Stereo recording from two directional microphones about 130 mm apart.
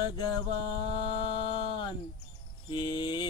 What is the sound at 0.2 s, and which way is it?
Mantra, 40° left (ahead or behind).